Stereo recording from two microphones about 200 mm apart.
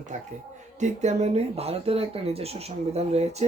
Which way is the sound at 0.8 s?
35° right (ahead or behind).